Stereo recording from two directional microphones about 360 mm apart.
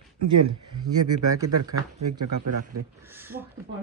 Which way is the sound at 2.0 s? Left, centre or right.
Right.